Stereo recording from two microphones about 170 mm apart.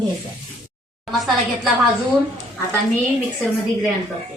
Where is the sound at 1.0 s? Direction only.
Centre (ahead or behind).